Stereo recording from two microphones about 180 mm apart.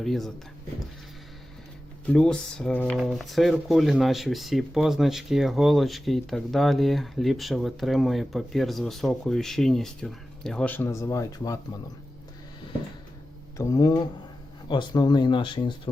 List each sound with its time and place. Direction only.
0.0 s speech: centre (ahead or behind)
2.0 s speech: 5° left (ahead or behind)
13.6 s speech: 20° left (ahead or behind)